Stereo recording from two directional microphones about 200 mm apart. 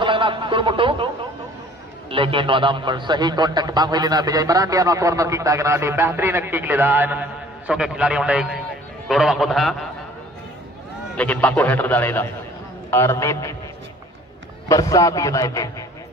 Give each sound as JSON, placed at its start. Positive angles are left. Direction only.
{"t": 0.0, "sound": "a sound", "side_deg": -25}
{"t": 2.0, "sound": "a man's voice", "side_deg": -25}
{"t": 11.1, "sound": "a man's voice", "side_deg": 5}
{"t": 14.7, "sound": "a man's voice", "side_deg": 15}